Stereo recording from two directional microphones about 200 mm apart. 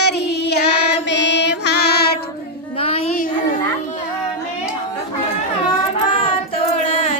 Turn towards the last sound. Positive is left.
turn(degrees=30)  # may be behind; listen again after turning